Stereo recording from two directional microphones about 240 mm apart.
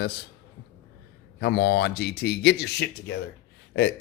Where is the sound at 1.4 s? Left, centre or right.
Left.